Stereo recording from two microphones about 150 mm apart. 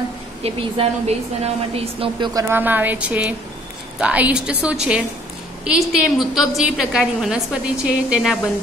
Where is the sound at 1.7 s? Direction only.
40° right (ahead or behind).